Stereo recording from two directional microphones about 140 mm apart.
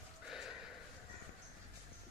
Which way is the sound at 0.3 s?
5° right (ahead or behind).